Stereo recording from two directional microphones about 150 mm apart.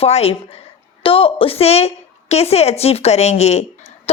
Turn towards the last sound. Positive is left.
turn(degrees=45)  # may be behind; listen again after turning